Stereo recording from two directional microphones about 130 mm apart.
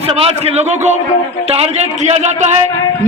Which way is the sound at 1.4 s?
50° right (ahead or behind).